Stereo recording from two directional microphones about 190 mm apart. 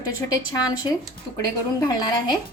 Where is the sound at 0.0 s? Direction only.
20° left (ahead or behind).